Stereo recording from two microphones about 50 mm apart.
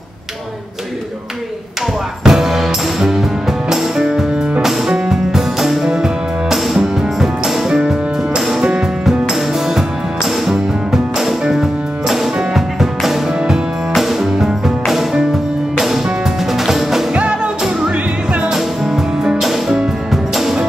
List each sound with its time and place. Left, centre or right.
2.2 s music: centre
16.5 s music: centre
17.1 s music: centre